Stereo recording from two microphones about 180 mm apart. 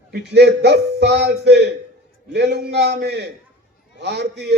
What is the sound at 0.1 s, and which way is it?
A man's voice, 65° right (ahead or behind).